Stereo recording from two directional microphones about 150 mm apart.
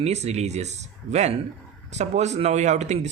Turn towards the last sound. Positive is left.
turn(degrees=-50)  # may be behind; listen again after turning